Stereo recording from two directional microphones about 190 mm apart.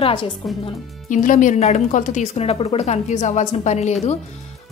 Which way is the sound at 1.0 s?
45° left (ahead or behind).